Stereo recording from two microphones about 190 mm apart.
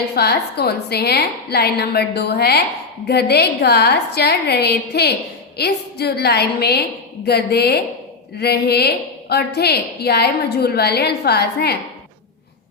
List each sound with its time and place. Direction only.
0.1 s a woman's voice: 60° left (ahead or behind)